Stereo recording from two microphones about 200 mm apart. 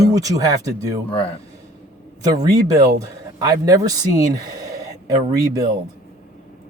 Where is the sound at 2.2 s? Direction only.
20° right (ahead or behind).